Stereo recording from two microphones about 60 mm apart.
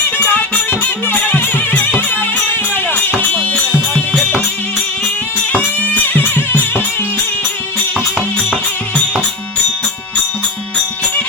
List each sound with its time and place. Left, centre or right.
0.3 s music: left
5.5 s music: left